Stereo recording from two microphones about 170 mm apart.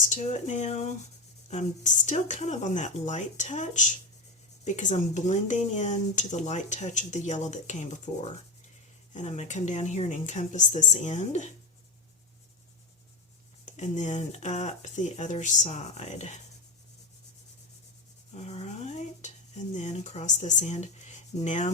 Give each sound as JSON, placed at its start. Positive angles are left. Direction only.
{"t": 0.1, "sound": "speech", "side_deg": 45}
{"t": 13.7, "sound": "speech", "side_deg": 45}
{"t": 18.3, "sound": "dishes", "side_deg": 40}